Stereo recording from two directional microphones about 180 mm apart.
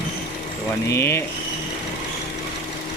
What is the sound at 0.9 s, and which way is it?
Speech, 15° left (ahead or behind).